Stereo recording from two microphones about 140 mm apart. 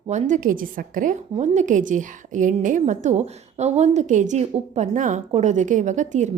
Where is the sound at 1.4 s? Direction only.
60° right (ahead or behind).